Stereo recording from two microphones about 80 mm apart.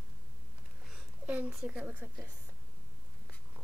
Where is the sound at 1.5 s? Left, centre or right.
Centre.